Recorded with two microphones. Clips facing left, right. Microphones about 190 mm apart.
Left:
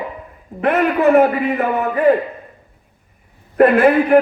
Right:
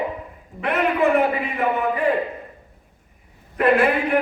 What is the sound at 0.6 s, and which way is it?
A man's voice, 45° left (ahead or behind).